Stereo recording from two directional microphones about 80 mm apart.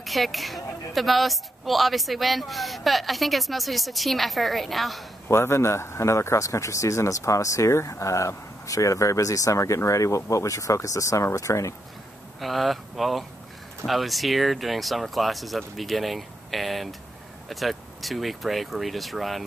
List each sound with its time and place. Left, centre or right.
0.0 s a woman's voice: centre
5.3 s speech: left
12.4 s a woman's voice: centre